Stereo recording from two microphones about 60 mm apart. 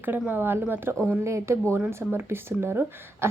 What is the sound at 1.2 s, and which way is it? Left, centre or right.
Speech, right.